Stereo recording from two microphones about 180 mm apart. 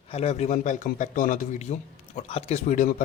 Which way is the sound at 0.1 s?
35° left (ahead or behind).